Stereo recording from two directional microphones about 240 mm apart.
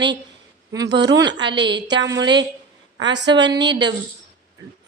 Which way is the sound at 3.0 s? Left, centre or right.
Right.